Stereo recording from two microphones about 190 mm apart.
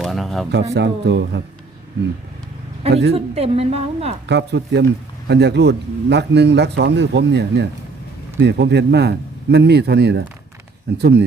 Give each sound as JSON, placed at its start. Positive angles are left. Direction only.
{"t": 0.0, "sound": "a sound", "side_deg": 0}
{"t": 0.5, "sound": "speech", "side_deg": -65}
{"t": 3.1, "sound": "a woman's voice", "side_deg": -30}
{"t": 4.3, "sound": "speech", "side_deg": -65}